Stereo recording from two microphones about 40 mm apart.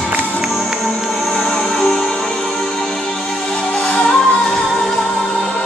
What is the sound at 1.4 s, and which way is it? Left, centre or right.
Music, centre.